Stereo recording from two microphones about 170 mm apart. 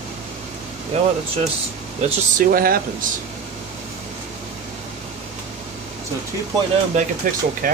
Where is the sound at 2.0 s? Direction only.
55° right (ahead or behind).